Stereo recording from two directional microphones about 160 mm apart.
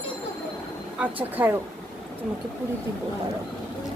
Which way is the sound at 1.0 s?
10° right (ahead or behind).